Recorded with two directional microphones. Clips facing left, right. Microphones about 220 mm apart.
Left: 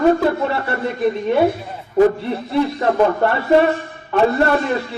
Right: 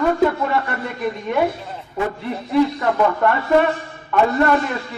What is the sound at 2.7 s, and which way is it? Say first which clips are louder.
A man's voice: left 3 dB; 30° left (ahead or behind).